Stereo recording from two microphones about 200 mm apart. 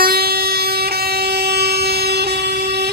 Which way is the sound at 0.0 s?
50° right (ahead or behind).